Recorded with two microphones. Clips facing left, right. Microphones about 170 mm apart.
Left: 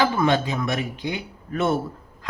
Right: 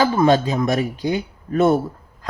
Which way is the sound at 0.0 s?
40° right (ahead or behind).